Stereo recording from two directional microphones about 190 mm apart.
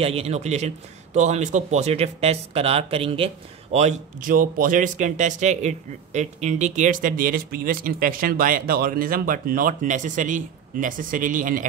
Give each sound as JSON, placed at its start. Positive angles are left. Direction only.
{"t": 0.0, "sound": "speech", "side_deg": -30}